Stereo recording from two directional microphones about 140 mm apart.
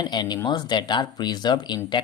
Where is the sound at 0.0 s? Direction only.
30° left (ahead or behind).